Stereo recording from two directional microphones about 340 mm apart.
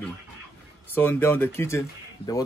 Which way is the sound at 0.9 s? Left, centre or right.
Centre.